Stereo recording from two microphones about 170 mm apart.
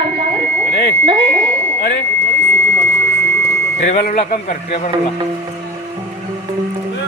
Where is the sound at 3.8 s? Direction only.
40° left (ahead or behind).